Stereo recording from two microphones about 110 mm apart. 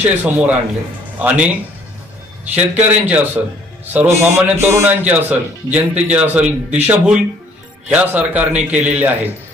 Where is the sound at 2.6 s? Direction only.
15° right (ahead or behind).